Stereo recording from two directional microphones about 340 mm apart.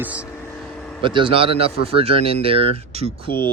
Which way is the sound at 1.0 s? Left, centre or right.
Centre.